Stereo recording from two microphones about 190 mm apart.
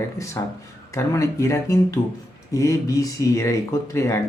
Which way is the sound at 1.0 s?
15° left (ahead or behind).